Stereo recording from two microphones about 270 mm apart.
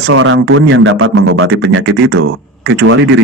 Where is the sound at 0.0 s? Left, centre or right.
Right.